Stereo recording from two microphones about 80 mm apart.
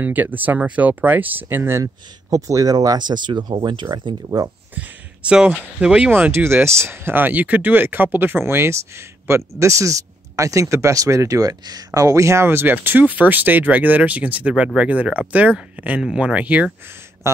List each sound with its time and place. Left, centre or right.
0.0 s speech: right
5.3 s speech: centre